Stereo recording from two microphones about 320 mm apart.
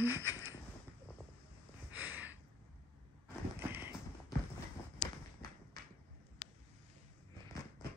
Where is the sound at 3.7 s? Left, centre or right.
Centre.